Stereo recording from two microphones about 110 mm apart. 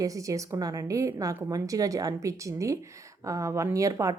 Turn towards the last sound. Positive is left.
turn(degrees=-30)  # may be behind; listen again after turning